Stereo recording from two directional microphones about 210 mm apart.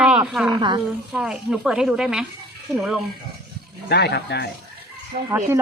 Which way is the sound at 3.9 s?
50° left (ahead or behind).